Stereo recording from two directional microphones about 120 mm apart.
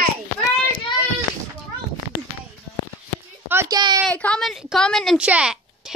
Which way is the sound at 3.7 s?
35° right (ahead or behind).